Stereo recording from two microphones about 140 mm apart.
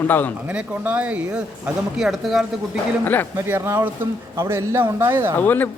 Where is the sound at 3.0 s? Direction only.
15° left (ahead or behind).